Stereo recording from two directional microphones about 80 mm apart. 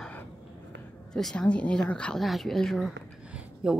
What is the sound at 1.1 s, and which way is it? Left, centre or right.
A woman's voice, centre.